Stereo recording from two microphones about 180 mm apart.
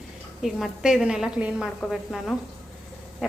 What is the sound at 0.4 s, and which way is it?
A woman's voice, centre (ahead or behind).